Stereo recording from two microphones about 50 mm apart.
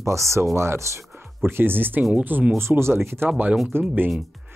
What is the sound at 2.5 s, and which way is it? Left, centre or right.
Speech, right.